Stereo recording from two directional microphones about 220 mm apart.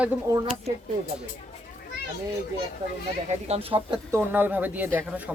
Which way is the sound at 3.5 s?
25° right (ahead or behind).